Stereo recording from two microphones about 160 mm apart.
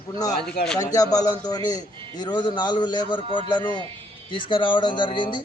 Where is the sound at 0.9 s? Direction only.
20° left (ahead or behind).